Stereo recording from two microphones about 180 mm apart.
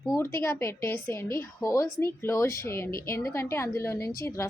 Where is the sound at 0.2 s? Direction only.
15° left (ahead or behind).